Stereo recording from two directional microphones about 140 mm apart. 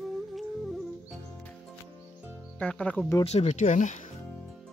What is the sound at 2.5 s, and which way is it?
Speech, 10° left (ahead or behind).